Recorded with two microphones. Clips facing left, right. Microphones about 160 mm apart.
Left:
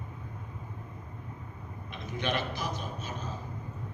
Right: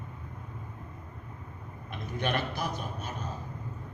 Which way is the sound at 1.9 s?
55° right (ahead or behind).